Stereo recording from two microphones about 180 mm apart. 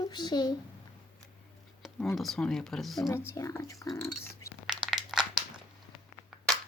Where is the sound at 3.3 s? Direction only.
15° left (ahead or behind).